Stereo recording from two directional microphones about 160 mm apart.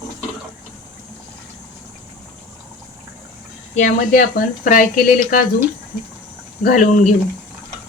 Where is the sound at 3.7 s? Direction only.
55° left (ahead or behind).